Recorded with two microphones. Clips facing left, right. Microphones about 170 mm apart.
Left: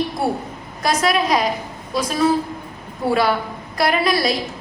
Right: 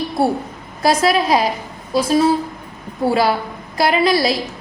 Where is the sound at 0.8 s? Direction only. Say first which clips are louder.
Right 3 dB; 30° right (ahead or behind).